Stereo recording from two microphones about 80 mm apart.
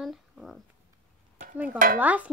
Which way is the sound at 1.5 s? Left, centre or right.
Centre.